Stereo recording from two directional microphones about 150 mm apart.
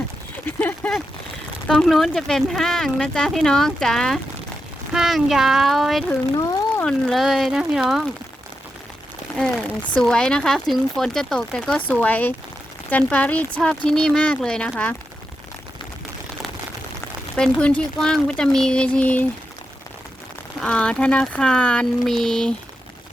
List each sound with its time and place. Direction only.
0.4 s speech: 10° left (ahead or behind)
10.0 s speech: 5° left (ahead or behind)
17.3 s speech: 5° left (ahead or behind)
20.6 s speech: 5° left (ahead or behind)